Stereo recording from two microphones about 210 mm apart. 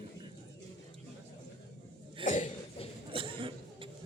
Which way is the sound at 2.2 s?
35° left (ahead or behind).